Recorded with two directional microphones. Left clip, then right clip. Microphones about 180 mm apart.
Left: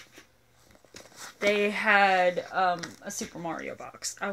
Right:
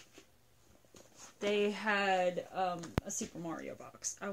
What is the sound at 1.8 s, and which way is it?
Speech, 5° right (ahead or behind).